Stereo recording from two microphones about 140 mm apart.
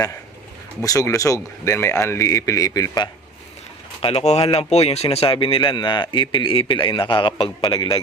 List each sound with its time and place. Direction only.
0.8 s speech: 25° left (ahead or behind)
4.0 s speech: 50° left (ahead or behind)